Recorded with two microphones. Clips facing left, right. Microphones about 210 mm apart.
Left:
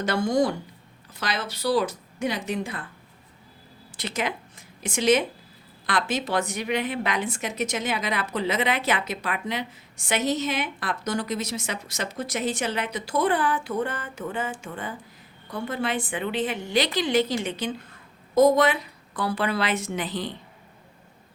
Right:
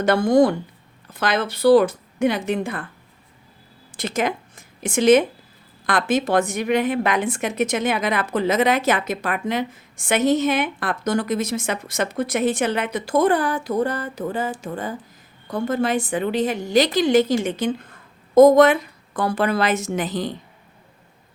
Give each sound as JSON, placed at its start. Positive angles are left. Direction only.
{"t": 0.0, "sound": "a woman's voice", "side_deg": -55}
{"t": 3.9, "sound": "a woman's voice", "side_deg": -45}